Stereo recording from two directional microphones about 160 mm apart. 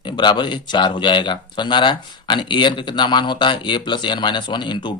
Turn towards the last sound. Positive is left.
turn(degrees=30)  # may be behind; listen again after turning